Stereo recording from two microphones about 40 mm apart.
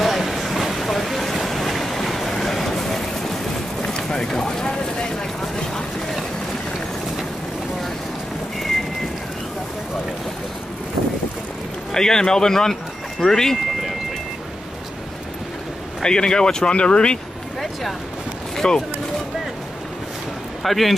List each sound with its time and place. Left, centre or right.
0.0 s vehicle: centre
3.8 s vehicle: centre
8.5 s rain: centre
11.9 s a man's voice: centre
16.0 s speech: centre
18.6 s speech: left
20.6 s speech: centre